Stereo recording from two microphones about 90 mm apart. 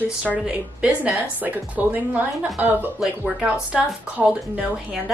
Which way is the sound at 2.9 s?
5° right (ahead or behind).